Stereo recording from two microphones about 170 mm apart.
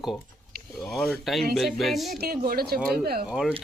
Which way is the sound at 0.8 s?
Centre (ahead or behind).